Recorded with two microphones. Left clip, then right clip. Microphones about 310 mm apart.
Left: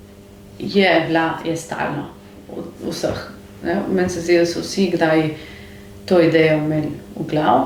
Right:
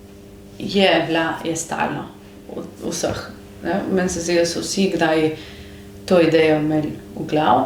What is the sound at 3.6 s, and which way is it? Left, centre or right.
Speech, right.